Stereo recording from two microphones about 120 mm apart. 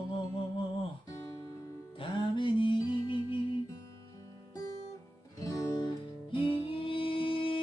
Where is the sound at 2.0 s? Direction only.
45° left (ahead or behind).